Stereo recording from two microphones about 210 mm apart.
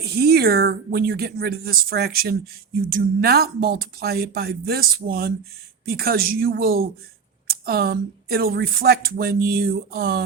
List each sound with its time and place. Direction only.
0.0 s speech: 50° right (ahead or behind)